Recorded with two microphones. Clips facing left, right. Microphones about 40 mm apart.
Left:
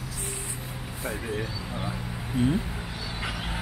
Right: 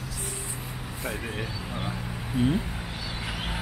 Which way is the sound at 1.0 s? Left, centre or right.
Centre.